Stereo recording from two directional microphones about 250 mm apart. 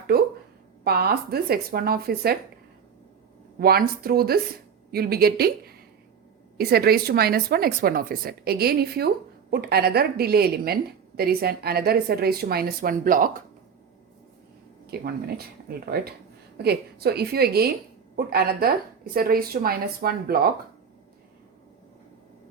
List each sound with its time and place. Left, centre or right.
0.1 s speech: right
3.6 s speech: right
14.8 s speech: right